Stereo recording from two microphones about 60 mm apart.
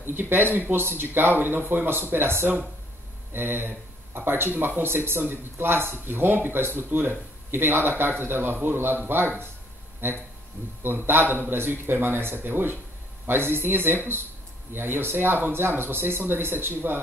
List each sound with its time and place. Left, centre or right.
0.0 s speech: right